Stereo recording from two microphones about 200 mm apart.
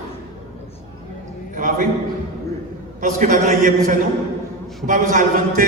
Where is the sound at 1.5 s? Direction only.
40° right (ahead or behind).